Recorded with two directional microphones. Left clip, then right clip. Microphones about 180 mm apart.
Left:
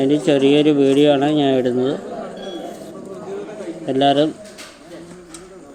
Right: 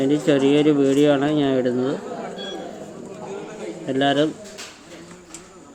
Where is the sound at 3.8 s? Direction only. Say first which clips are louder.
Left 4 dB; 15° left (ahead or behind).